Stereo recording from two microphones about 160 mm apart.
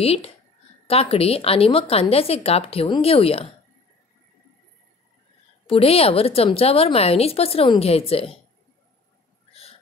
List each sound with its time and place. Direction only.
0.0 s a woman's voice: 40° left (ahead or behind)
5.7 s a woman's voice: 35° left (ahead or behind)
9.5 s a sound: 40° left (ahead or behind)